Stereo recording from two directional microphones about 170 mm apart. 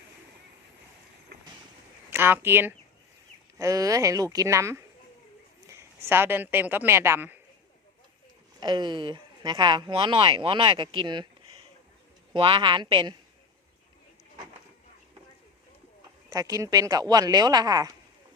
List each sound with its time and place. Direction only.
2.0 s a woman's voice: 10° right (ahead or behind)
8.6 s speech: 25° right (ahead or behind)
16.3 s speech: 20° right (ahead or behind)